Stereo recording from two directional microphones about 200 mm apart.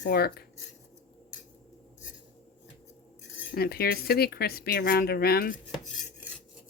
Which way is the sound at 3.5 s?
50° left (ahead or behind).